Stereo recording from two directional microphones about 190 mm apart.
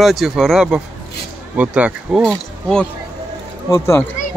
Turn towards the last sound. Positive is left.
turn(degrees=15)  # may be behind; listen again after turning